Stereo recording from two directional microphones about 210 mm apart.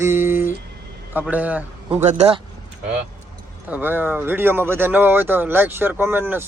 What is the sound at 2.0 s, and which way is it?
Speech, 35° right (ahead or behind).